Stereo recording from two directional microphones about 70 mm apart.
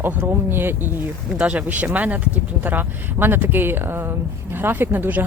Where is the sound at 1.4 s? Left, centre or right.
Centre.